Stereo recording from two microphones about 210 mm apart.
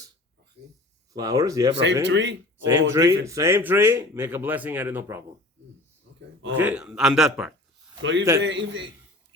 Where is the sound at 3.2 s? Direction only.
15° right (ahead or behind).